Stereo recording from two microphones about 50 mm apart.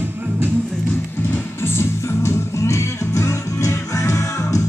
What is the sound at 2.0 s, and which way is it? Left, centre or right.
Music, left.